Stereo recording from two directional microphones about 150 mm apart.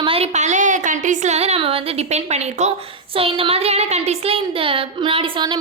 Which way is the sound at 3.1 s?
35° right (ahead or behind).